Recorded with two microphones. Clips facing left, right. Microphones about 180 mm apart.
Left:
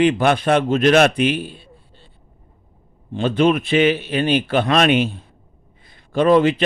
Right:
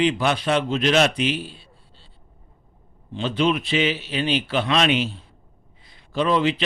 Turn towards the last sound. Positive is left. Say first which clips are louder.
# left 6 dB
turn(degrees=50)  # may be behind; listen again after turning